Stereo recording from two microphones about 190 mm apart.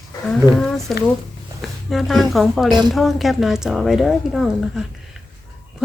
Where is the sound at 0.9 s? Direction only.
Centre (ahead or behind).